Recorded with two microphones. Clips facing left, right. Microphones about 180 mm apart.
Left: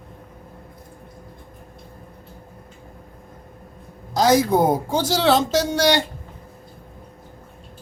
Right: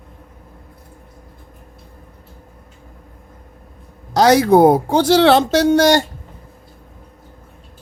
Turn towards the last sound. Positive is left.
turn(degrees=-50)  # may be behind; listen again after turning